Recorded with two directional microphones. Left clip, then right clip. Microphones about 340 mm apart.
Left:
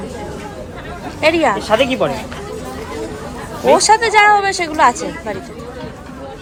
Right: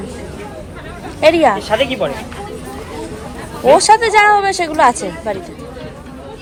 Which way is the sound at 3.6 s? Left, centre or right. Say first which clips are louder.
Right 2 dB; centre.